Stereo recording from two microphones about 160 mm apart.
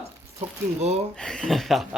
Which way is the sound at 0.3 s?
40° right (ahead or behind).